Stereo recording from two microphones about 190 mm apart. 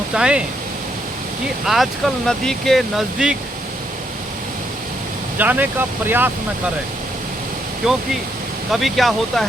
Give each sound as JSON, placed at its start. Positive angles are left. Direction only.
{"t": 0.1, "sound": "speech", "side_deg": -5}
{"t": 1.6, "sound": "speech", "side_deg": 0}
{"t": 5.4, "sound": "speech", "side_deg": -10}
{"t": 7.8, "sound": "speech", "side_deg": 0}